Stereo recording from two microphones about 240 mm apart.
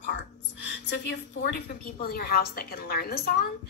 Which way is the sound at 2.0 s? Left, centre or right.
Left.